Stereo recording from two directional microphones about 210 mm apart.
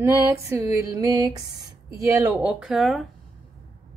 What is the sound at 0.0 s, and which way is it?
Speech, 15° right (ahead or behind).